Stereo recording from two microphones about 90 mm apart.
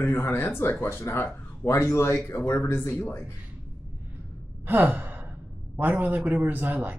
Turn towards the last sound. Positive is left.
turn(degrees=-20)  # may be behind; listen again after turning